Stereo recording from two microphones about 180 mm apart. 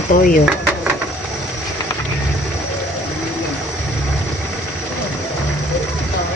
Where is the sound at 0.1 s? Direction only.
45° left (ahead or behind).